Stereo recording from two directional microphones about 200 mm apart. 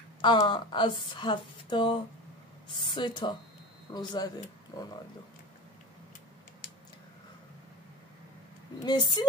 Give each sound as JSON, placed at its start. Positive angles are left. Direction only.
{"t": 0.2, "sound": "speech", "side_deg": 25}
{"t": 8.8, "sound": "speech", "side_deg": 20}